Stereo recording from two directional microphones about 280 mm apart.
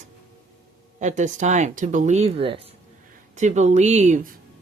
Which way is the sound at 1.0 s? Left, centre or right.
Right.